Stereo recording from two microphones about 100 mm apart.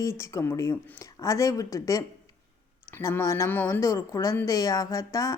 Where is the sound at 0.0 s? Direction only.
30° left (ahead or behind).